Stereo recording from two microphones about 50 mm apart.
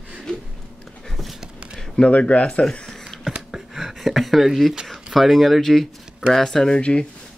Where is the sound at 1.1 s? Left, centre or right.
Centre.